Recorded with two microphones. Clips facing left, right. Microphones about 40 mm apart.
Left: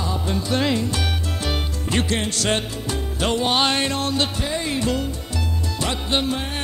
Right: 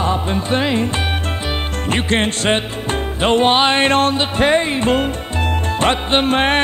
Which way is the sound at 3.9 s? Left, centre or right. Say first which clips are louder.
Right 8 dB; right.